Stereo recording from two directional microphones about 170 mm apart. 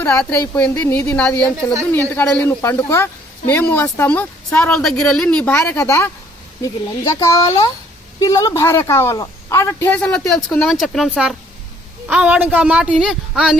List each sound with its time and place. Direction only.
0.3 s a woman's voice: 10° left (ahead or behind)